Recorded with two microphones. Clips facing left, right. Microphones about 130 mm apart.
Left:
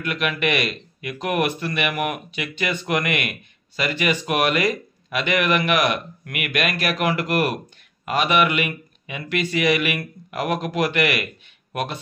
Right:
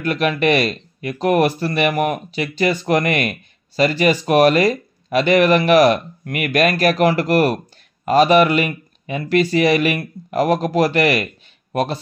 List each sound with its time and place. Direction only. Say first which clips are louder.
0.0 s speech: right 6 dB; 35° right (ahead or behind)